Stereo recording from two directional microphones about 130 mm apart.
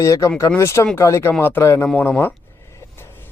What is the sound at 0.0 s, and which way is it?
Speech, 25° left (ahead or behind).